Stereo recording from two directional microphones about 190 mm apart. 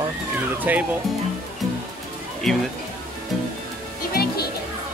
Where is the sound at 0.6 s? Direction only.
10° right (ahead or behind).